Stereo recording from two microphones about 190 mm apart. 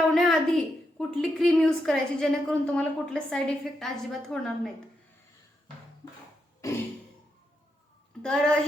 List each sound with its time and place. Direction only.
0.1 s a woman's voice: centre (ahead or behind)
6.6 s a sound: 15° left (ahead or behind)
8.2 s a woman's voice: 5° left (ahead or behind)